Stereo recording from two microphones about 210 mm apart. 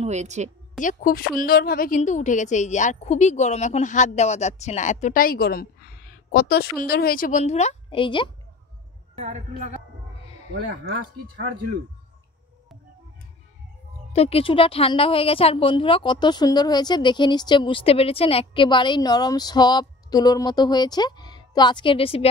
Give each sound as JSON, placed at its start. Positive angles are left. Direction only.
{"t": 0.0, "sound": "a woman's voice", "side_deg": -35}
{"t": 0.7, "sound": "a woman's voice", "side_deg": 40}
{"t": 10.2, "sound": "a sound", "side_deg": 30}
{"t": 14.1, "sound": "a woman's voice", "side_deg": 30}